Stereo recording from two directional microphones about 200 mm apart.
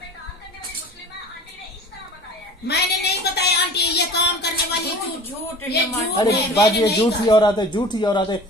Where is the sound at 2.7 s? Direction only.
55° left (ahead or behind).